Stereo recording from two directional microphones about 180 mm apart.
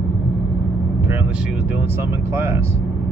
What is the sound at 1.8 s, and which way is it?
Speech, 15° right (ahead or behind).